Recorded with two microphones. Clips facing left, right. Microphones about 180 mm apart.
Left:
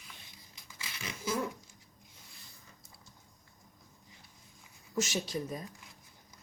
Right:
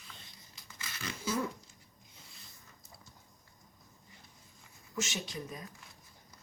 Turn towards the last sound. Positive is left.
turn(degrees=40)  # may be behind; listen again after turning